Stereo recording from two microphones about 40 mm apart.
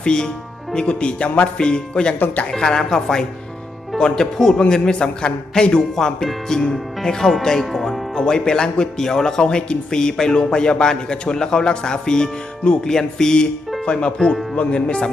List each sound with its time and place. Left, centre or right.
0.0 s speech: left
2.1 s speech: left
2.5 s a woman's voice: centre
4.7 s a woman's voice: left; by 8.0 s centre
8.1 s a woman's voice: left
13.8 s speech: left